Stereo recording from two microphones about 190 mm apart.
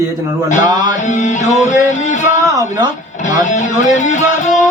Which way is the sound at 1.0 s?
40° left (ahead or behind).